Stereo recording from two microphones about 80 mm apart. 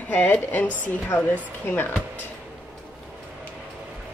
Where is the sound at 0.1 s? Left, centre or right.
Centre.